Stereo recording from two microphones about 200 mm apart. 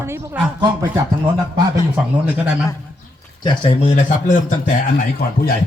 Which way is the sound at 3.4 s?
25° left (ahead or behind).